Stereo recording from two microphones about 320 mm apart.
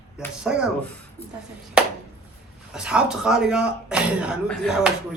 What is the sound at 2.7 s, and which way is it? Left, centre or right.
Speech, centre.